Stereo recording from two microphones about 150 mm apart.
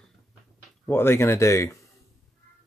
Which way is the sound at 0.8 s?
15° left (ahead or behind).